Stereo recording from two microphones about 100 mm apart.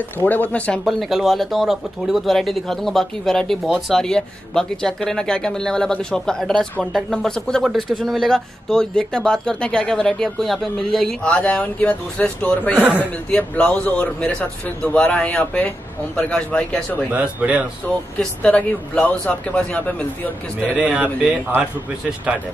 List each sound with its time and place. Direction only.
0.2 s speech: 15° left (ahead or behind)
0.8 s speech: centre (ahead or behind); by 12.7 s 15° left (ahead or behind)
12.7 s speech: 15° right (ahead or behind)
13.0 s speech: 15° left (ahead or behind)
17.1 s speech: 15° right (ahead or behind)
17.8 s speech: 10° left (ahead or behind)
20.7 s speech: 10° right (ahead or behind)